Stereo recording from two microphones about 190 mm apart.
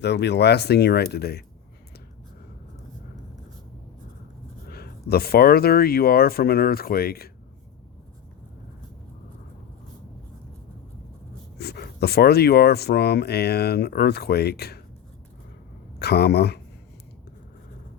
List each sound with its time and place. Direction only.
0.0 s speech: 60° left (ahead or behind)
4.7 s speech: 55° left (ahead or behind)
11.5 s speech: 55° left (ahead or behind)
16.0 s speech: 60° left (ahead or behind)